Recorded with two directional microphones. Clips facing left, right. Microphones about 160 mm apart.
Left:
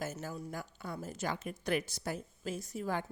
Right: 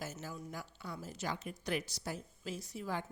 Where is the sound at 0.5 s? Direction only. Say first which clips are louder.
Left 3 dB; 50° left (ahead or behind).